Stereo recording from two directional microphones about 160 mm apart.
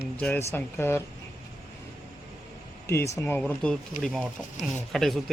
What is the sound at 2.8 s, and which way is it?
Speech, 15° left (ahead or behind).